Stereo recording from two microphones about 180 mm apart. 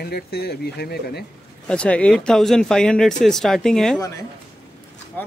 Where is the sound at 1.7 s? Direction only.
5° left (ahead or behind).